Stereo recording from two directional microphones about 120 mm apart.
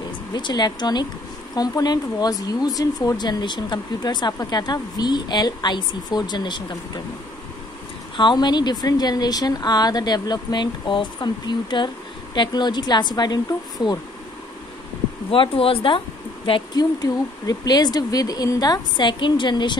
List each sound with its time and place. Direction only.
0.3 s speech: 40° left (ahead or behind)
8.2 s speech: 40° left (ahead or behind)
15.3 s speech: 50° left (ahead or behind)
17.0 s speech: 35° left (ahead or behind)